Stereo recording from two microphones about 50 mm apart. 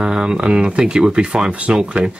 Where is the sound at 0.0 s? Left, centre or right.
Centre.